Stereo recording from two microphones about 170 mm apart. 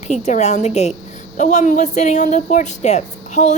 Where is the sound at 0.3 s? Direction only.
45° left (ahead or behind).